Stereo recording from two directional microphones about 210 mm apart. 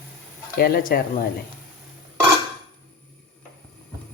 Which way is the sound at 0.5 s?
45° left (ahead or behind).